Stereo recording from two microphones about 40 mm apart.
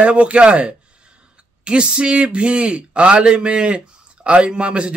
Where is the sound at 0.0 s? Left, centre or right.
Right.